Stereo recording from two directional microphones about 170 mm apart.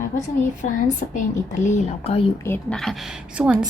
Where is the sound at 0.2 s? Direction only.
45° left (ahead or behind).